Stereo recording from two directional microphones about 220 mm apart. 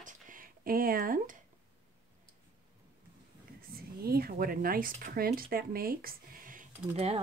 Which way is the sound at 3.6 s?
45° right (ahead or behind).